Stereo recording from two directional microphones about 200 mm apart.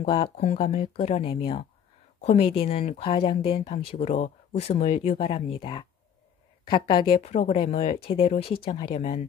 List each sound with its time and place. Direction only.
0.0 s speech: 30° left (ahead or behind)